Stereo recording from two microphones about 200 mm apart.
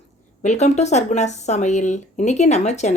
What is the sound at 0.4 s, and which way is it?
Speech, 35° left (ahead or behind).